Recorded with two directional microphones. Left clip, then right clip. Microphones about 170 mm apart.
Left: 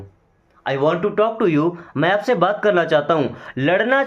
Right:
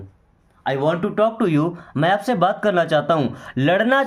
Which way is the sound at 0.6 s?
40° right (ahead or behind).